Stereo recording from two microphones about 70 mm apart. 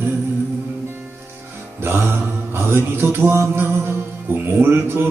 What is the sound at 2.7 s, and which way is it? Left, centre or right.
Music, right.